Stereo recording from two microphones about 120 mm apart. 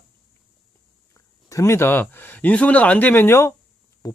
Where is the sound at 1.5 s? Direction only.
25° left (ahead or behind).